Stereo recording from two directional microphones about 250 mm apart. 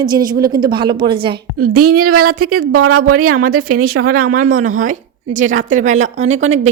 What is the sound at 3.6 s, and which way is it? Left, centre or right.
A woman's voice, right.